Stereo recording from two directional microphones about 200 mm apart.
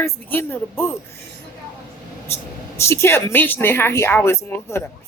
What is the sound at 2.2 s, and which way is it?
Speech, 15° left (ahead or behind).